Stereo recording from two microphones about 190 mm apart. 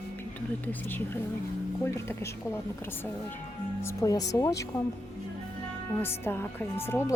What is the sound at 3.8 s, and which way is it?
Speech, 15° left (ahead or behind).